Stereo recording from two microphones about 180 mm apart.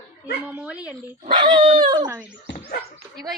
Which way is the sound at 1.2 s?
25° right (ahead or behind).